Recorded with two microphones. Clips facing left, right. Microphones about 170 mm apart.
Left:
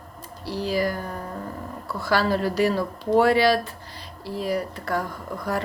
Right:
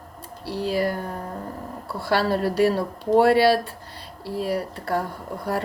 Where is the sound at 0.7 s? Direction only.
30° right (ahead or behind).